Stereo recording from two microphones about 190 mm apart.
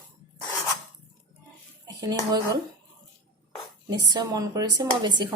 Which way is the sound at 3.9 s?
20° right (ahead or behind).